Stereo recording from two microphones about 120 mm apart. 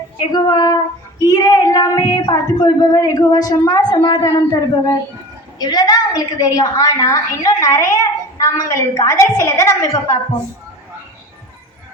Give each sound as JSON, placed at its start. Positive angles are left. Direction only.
{"t": 0.3, "sound": "a woman's voice", "side_deg": 35}